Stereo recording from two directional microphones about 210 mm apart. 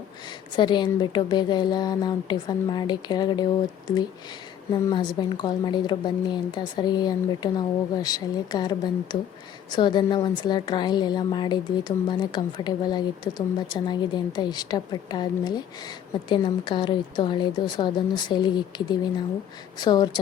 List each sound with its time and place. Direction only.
0.5 s a woman's voice: 20° left (ahead or behind)
4.7 s a woman's voice: 20° left (ahead or behind)